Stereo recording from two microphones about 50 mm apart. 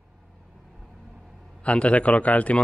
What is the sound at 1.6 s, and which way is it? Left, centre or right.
A man's voice, left.